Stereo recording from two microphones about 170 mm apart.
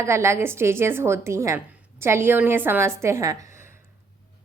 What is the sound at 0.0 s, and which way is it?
Speech, 15° right (ahead or behind).